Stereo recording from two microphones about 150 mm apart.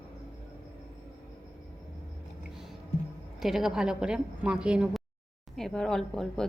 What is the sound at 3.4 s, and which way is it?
Speech, centre (ahead or behind).